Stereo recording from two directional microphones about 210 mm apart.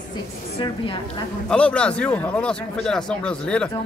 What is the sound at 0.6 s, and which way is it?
Speech, 25° left (ahead or behind).